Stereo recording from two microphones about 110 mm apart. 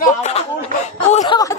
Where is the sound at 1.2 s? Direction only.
35° left (ahead or behind).